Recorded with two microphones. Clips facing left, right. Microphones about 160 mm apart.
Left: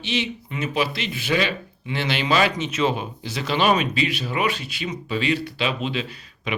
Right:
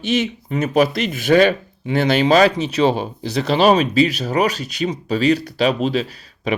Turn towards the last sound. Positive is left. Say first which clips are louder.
# right 7 dB
turn(degrees=-35)  # may be behind; listen again after turning